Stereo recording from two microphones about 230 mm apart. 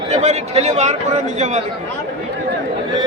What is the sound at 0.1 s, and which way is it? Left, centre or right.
Speech, right.